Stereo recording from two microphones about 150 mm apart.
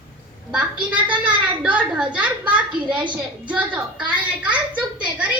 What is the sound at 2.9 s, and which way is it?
Speech, 30° right (ahead or behind).